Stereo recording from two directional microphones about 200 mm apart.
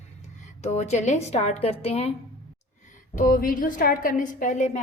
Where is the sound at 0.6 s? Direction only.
35° left (ahead or behind).